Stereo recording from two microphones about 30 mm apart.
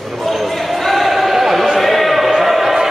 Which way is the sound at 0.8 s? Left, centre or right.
Centre.